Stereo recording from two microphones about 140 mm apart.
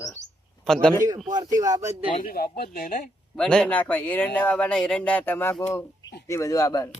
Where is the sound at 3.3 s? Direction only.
5° left (ahead or behind); by 6.8 s 25° left (ahead or behind).